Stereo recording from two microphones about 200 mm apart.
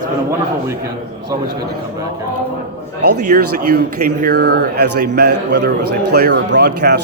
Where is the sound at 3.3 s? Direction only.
50° right (ahead or behind).